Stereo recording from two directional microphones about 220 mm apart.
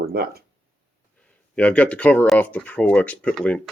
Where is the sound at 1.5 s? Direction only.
5° left (ahead or behind).